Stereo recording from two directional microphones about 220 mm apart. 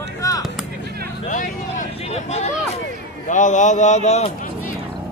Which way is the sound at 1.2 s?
35° left (ahead or behind).